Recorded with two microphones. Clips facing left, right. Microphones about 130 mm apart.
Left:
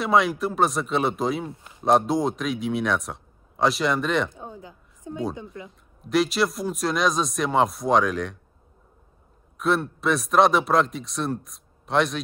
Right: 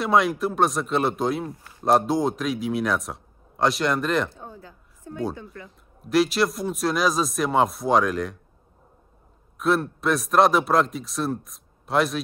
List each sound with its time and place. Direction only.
0.0 s speech: centre (ahead or behind)
4.3 s a sound: 15° left (ahead or behind)
5.3 s speech: 20° left (ahead or behind)
5.7 s speech: centre (ahead or behind)
9.6 s speech: centre (ahead or behind)